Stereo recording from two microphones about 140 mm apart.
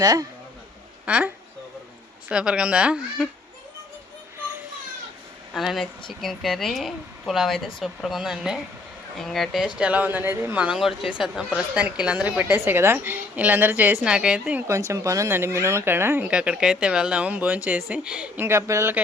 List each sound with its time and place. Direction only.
0.0 s speech: 25° right (ahead or behind)
1.0 s speech: 10° right (ahead or behind)
2.3 s speech: 5° right (ahead or behind)
5.5 s speech: centre (ahead or behind)
14.7 s speech: 20° right (ahead or behind)